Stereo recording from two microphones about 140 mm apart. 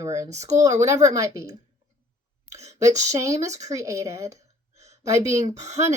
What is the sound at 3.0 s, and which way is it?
Speech, 25° right (ahead or behind).